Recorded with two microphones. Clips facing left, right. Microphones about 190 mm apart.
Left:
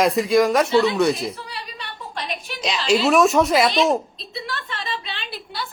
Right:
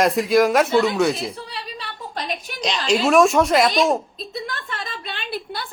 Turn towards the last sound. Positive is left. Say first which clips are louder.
# right 3 dB
turn(degrees=-50)  # may be behind; listen again after turning